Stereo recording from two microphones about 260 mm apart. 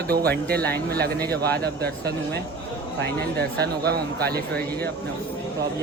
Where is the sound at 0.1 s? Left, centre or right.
Right.